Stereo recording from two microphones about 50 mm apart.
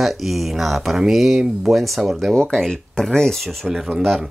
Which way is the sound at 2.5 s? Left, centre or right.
Centre.